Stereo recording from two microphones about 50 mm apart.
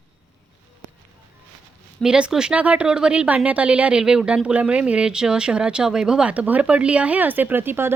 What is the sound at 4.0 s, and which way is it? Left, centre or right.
Speech, centre.